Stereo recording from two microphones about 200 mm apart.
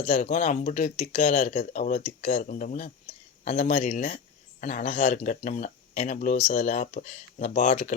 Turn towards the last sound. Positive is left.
turn(degrees=35)  # may be behind; listen again after turning